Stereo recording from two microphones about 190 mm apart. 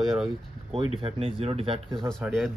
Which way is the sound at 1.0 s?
30° right (ahead or behind).